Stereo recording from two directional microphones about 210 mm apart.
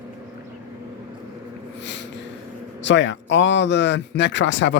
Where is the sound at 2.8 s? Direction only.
60° left (ahead or behind).